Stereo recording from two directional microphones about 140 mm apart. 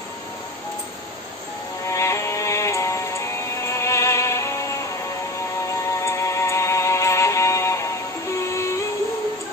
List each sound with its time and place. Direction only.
1.9 s music: 20° left (ahead or behind)
5.9 s music: 20° left (ahead or behind)